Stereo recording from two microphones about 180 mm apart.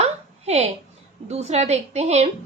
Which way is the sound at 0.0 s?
35° right (ahead or behind).